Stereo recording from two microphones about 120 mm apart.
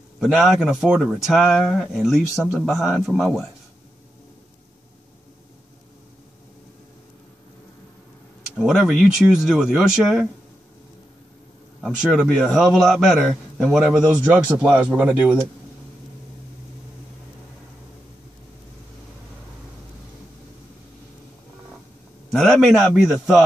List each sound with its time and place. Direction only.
0.2 s speech: 5° right (ahead or behind)
8.5 s speech: 5° right (ahead or behind)
11.8 s speech: centre (ahead or behind)
14.0 s speech: 15° right (ahead or behind)
22.3 s speech: centre (ahead or behind)